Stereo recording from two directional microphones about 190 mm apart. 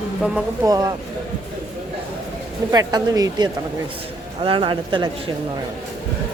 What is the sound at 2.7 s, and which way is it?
A woman's voice, 20° right (ahead or behind).